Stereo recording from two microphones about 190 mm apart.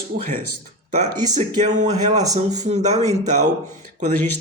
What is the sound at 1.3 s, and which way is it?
Speech, 40° right (ahead or behind).